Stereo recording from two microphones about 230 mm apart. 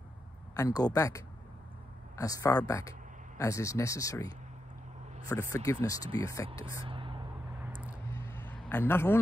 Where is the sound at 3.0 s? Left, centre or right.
Right.